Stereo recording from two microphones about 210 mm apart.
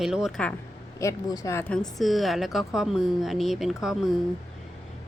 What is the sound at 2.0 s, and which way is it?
A woman's voice, centre (ahead or behind).